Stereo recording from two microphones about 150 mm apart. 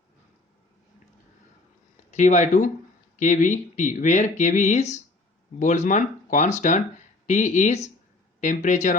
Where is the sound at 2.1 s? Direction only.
55° left (ahead or behind).